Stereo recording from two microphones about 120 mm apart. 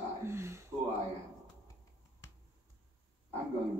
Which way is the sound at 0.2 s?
20° right (ahead or behind).